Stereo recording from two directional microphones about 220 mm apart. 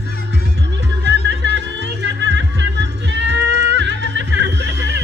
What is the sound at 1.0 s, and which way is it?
Music, 50° right (ahead or behind).